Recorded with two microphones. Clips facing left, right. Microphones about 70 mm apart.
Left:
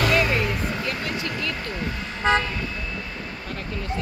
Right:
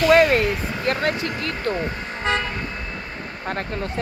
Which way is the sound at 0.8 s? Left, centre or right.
Right.